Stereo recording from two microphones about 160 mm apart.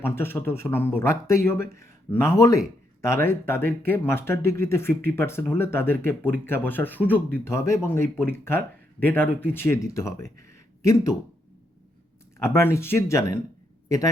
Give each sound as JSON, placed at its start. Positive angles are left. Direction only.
{"t": 0.0, "sound": "speech", "side_deg": 15}
{"t": 12.4, "sound": "speech", "side_deg": 15}